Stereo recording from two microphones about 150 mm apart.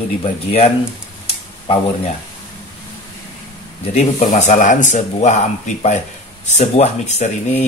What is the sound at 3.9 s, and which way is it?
Speech, 50° left (ahead or behind).